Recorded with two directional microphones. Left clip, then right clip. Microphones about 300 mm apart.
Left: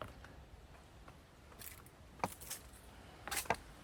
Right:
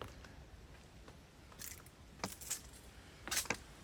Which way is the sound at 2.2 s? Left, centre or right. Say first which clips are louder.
Left 5 dB; left.